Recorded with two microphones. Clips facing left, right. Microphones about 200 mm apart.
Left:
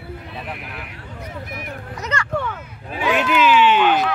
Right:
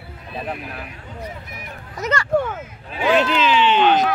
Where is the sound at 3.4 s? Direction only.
10° left (ahead or behind).